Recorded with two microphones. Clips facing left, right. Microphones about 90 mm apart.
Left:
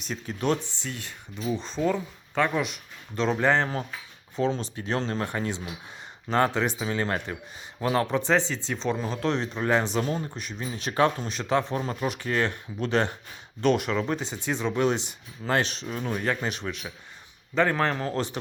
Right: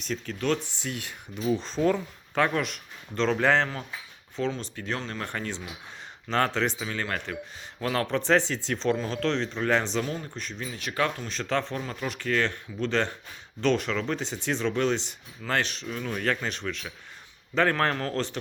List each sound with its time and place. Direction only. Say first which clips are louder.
0.3 s speech: left 2 dB; 15° left (ahead or behind)
0.8 s speech: right 2 dB; 5° right (ahead or behind)
4.4 s speech: left 3 dB; 20° left (ahead or behind)
5.2 s speech: left 4 dB; 15° left (ahead or behind)
6.8 s a man's voice: left 4 dB; 25° left (ahead or behind)
8.1 s speech: even; centre (ahead or behind)
10.0 s speech: left 3 dB; 30° left (ahead or behind)
10.3 s speech: even; 15° left (ahead or behind)
10.6 s speech: left 5 dB; 25° left (ahead or behind)
11.3 s speech: left 1 dB; 15° left (ahead or behind)
11.7 s speech: left 4 dB; 25° left (ahead or behind)
16.1 s speech: even; 15° left (ahead or behind)